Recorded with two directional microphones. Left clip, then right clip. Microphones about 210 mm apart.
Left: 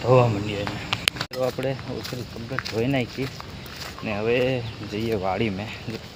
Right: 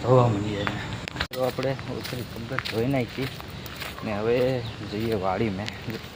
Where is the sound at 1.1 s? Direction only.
Centre (ahead or behind).